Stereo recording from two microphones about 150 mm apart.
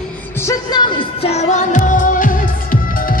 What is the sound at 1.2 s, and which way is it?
Music, 45° left (ahead or behind).